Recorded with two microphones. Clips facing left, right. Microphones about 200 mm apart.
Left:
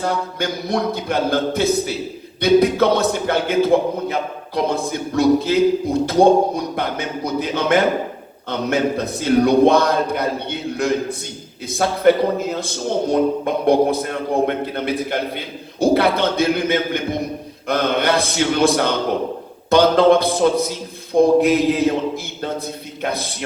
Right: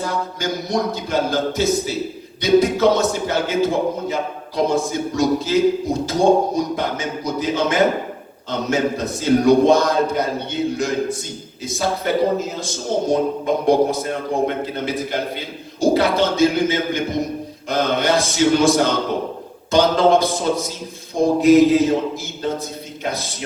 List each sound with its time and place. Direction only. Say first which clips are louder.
0.0 s a man's voice: left 2 dB; 60° left (ahead or behind)